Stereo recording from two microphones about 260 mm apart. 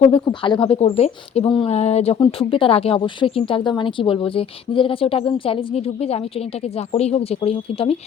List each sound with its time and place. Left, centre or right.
0.0 s speech: centre